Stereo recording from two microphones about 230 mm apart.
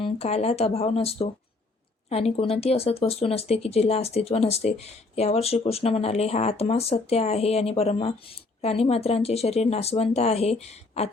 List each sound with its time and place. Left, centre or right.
0.0 s speech: left